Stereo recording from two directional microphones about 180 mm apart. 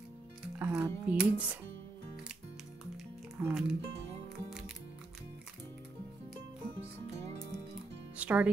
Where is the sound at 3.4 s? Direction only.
10° right (ahead or behind).